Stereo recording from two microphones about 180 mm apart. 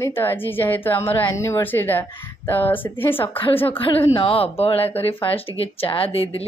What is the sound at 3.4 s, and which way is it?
Speech, 30° left (ahead or behind).